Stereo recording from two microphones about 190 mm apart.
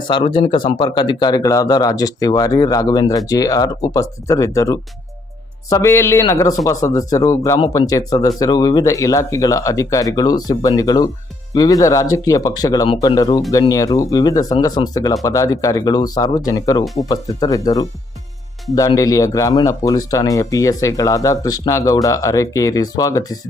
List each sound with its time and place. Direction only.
0.1 s speech: 25° left (ahead or behind)